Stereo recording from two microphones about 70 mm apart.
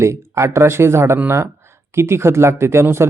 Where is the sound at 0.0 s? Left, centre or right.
Right.